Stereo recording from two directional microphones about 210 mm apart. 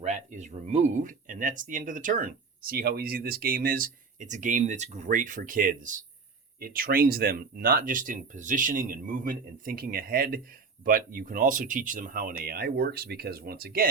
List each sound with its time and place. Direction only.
0.0 s speech: 35° right (ahead or behind)